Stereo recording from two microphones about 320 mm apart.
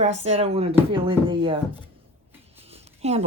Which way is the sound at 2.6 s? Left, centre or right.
Centre.